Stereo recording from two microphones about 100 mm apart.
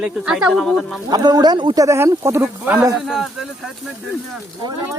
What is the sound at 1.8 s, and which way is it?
Speech, 30° right (ahead or behind).